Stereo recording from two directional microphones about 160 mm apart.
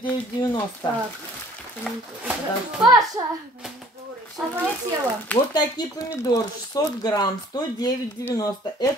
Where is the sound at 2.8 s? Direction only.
25° right (ahead or behind).